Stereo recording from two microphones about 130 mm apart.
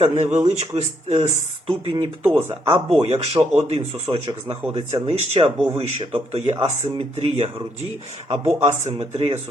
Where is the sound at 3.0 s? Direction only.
50° right (ahead or behind).